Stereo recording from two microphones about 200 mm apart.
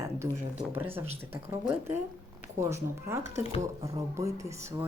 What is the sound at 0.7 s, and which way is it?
Speech, 10° right (ahead or behind).